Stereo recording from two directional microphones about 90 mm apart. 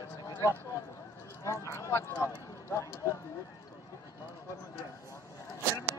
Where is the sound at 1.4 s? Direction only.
35° left (ahead or behind).